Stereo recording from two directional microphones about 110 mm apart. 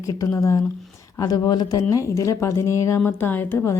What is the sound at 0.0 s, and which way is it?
Speech, 30° left (ahead or behind).